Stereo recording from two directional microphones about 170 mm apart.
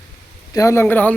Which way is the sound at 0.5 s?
15° left (ahead or behind).